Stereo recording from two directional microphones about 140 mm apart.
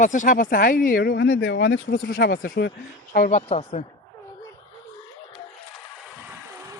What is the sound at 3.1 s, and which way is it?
Speech, 65° left (ahead or behind).